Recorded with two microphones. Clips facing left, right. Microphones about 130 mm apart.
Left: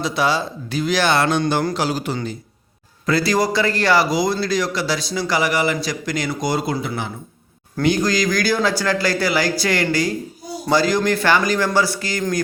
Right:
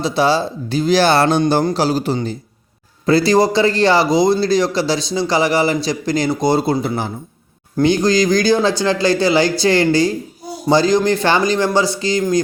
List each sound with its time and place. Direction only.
0.0 s a man's voice: 30° right (ahead or behind)